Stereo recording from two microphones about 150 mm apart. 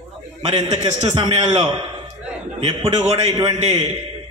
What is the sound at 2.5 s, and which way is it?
Speech, 30° right (ahead or behind).